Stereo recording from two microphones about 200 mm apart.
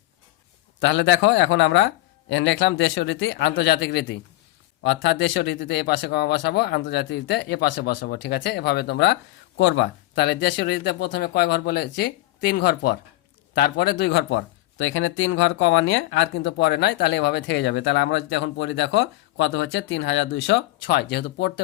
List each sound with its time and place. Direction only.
0.8 s speech: 65° left (ahead or behind)